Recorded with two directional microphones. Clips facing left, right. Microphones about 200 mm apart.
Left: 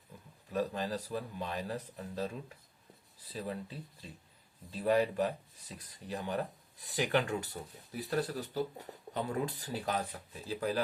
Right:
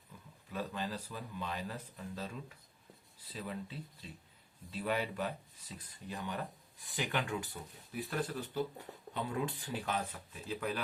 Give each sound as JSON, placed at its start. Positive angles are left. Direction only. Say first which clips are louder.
{"t": 0.5, "sound": "speech", "louder": "left 5 dB", "side_deg": 40}
{"t": 3.3, "sound": "speech", "louder": "left 3 dB", "side_deg": 35}
{"t": 4.8, "sound": "speech", "louder": "left 7 dB", "side_deg": 35}